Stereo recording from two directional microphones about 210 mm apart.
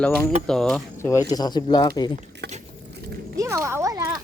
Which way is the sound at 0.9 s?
15° left (ahead or behind).